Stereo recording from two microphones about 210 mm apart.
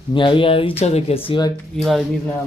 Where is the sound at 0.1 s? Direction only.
25° left (ahead or behind).